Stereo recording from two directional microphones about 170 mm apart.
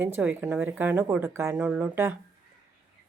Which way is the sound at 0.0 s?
10° right (ahead or behind).